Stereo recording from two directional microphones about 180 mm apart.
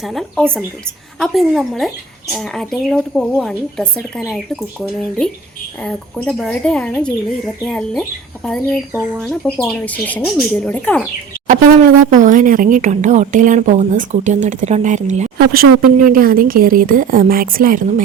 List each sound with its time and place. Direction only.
0.0 s speech: centre (ahead or behind)
11.4 s speech: 45° right (ahead or behind)
15.4 s speech: 55° right (ahead or behind)